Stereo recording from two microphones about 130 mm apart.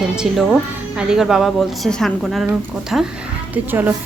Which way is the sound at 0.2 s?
5° right (ahead or behind).